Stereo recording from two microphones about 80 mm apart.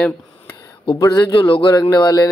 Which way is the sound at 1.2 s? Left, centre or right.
Left.